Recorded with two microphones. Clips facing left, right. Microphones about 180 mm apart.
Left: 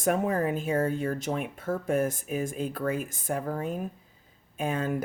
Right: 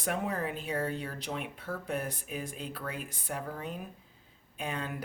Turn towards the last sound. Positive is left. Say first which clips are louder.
# left 8 dB
turn(degrees=45)  # may be behind; listen again after turning